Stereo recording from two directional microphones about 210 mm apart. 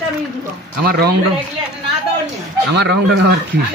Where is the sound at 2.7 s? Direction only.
50° right (ahead or behind).